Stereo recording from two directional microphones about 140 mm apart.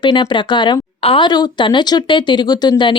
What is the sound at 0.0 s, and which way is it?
Speech, 35° left (ahead or behind).